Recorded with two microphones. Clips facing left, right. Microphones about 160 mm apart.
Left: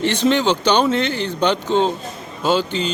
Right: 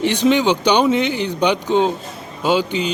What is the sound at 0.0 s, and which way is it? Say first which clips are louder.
Speech: right 2 dB; 15° right (ahead or behind).